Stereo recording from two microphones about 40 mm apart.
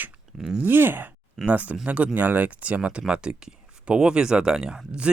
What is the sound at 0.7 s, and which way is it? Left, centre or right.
Speech, right.